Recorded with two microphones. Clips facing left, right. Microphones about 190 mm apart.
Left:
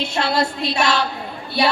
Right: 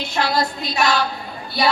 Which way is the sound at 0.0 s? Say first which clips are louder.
Left 1 dB; 25° left (ahead or behind).